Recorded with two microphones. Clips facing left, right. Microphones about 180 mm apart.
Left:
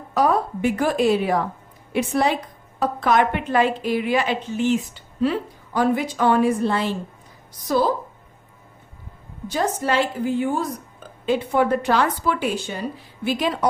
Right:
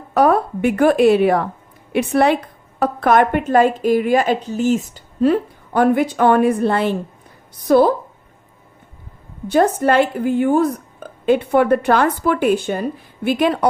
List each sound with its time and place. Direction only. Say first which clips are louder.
0.1 s a woman's voice: right 5 dB; 60° right (ahead or behind)
9.5 s a woman's voice: right 8 dB; 55° right (ahead or behind)